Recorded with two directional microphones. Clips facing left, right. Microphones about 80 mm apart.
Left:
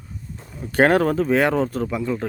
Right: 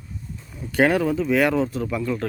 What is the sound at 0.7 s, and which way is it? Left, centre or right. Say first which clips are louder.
Speech: left 3 dB; left.